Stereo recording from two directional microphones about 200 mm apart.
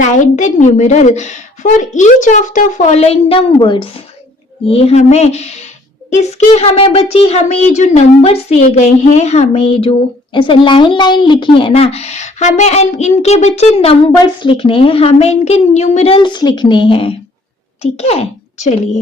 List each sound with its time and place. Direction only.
0.0 s a woman's voice: 35° left (ahead or behind)